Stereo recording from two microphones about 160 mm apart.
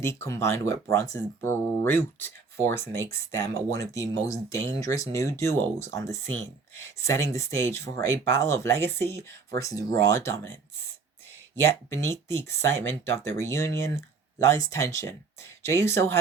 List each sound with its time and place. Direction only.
0.0 s speech: 15° left (ahead or behind)
11.6 s speech: 15° left (ahead or behind)